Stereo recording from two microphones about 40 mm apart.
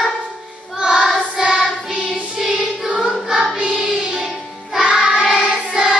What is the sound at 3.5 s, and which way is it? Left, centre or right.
Choir, centre.